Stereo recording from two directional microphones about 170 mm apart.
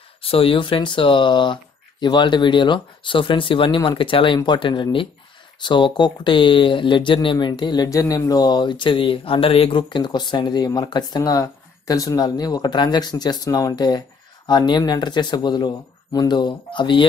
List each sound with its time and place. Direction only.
0.2 s speech: 35° left (ahead or behind)